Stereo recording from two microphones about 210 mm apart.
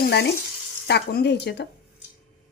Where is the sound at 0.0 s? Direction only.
50° left (ahead or behind).